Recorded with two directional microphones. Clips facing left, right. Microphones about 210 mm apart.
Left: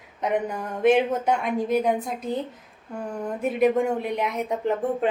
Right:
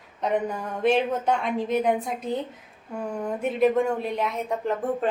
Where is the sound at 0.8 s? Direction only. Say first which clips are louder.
Left 3 dB; 10° left (ahead or behind).